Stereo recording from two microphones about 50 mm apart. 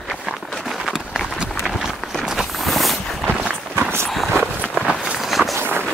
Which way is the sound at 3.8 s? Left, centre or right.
Right.